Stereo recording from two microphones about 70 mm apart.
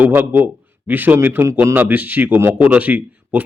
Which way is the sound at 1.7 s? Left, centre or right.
Right.